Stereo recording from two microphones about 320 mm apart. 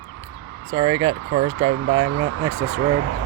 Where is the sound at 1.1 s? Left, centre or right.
Right.